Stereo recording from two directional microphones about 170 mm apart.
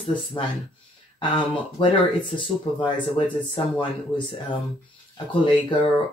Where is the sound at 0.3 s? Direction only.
25° left (ahead or behind).